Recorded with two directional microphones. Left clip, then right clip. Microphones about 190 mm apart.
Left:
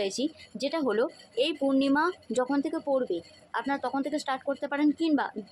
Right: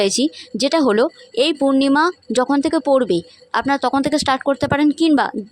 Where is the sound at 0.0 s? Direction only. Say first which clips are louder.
Right 13 dB; 50° right (ahead or behind).